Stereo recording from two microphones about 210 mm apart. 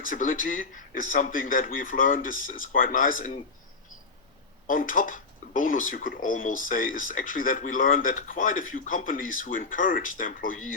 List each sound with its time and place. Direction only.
0.0 s speech: 40° left (ahead or behind)
4.6 s speech: 40° left (ahead or behind)